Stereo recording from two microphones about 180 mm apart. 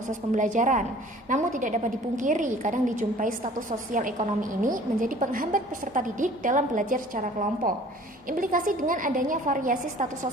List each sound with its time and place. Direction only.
0.1 s a woman's voice: 45° right (ahead or behind)